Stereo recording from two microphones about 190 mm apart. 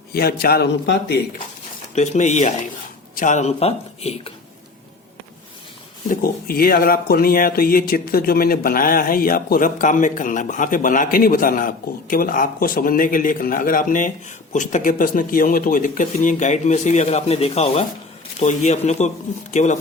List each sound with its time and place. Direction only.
0.1 s a man's voice: 55° left (ahead or behind)
2.0 s speech: 35° left (ahead or behind)
6.1 s speech: 50° left (ahead or behind)